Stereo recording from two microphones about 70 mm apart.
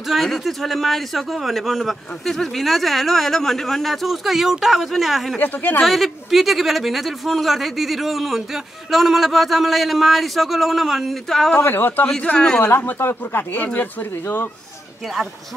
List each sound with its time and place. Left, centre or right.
0.1 s a man's voice: centre
5.4 s speech: left
5.9 s a man's voice: centre
11.5 s speech: left
12.1 s speech: centre
12.6 s speech: left